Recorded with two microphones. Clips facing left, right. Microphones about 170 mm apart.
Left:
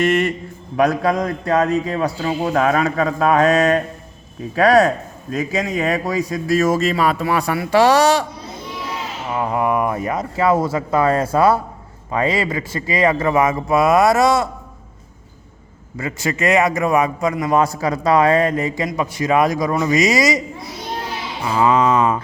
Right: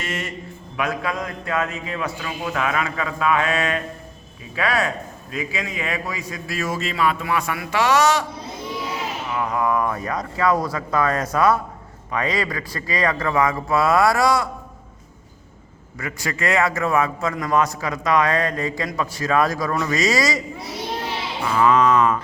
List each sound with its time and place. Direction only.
0.0 s a man's voice: 60° left (ahead or behind)
0.8 s a man's voice: 40° left (ahead or behind)
9.3 s a man's voice: 30° left (ahead or behind)
16.0 s a man's voice: 25° left (ahead or behind)
21.5 s a man's voice: 25° left (ahead or behind)